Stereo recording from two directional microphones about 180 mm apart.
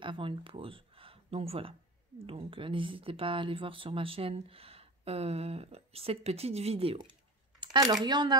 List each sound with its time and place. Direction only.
0.0 s speech: 30° right (ahead or behind)
7.6 s speech: 25° right (ahead or behind)